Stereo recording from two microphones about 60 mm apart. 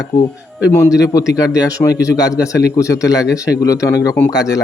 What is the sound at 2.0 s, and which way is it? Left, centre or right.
Speech, left.